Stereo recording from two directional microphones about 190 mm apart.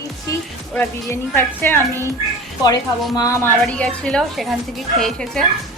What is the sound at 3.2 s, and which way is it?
Speech, 15° left (ahead or behind).